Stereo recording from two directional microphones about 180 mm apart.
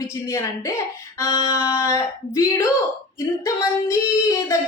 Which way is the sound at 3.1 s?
15° left (ahead or behind).